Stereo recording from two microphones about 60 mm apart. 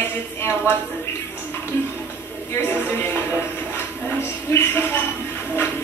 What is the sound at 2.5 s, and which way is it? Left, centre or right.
Music, left.